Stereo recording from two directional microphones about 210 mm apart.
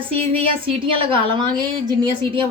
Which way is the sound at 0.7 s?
25° right (ahead or behind).